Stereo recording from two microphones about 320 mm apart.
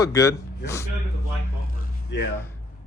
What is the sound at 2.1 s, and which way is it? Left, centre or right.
Speech, left.